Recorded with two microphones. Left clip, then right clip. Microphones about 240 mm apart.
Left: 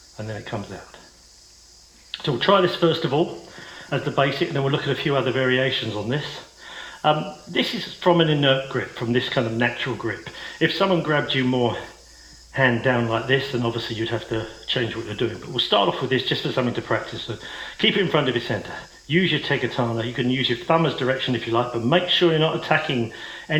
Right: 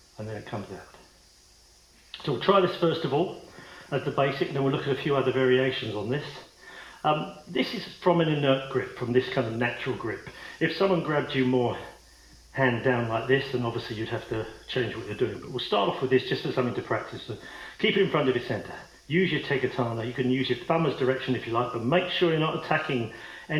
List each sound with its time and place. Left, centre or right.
0.5 s speech: left
2.2 s speech: left